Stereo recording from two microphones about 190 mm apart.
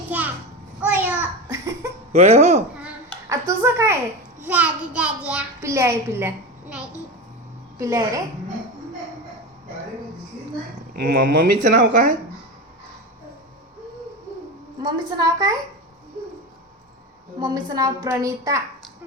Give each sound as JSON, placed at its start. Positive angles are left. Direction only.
{"t": 0.1, "sound": "a sound", "side_deg": -10}
{"t": 2.1, "sound": "speech", "side_deg": -35}
{"t": 2.7, "sound": "a sound", "side_deg": -10}
{"t": 4.4, "sound": "a child's voice", "side_deg": -5}
{"t": 10.9, "sound": "speech", "side_deg": -55}
{"t": 14.8, "sound": "a woman's voice", "side_deg": -20}
{"t": 17.4, "sound": "a woman's voice", "side_deg": -20}